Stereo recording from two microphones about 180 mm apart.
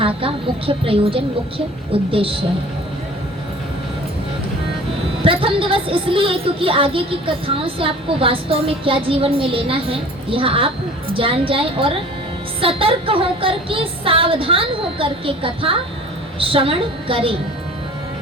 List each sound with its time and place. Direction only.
0.0 s speech: 30° right (ahead or behind)
5.2 s speech: 30° right (ahead or behind)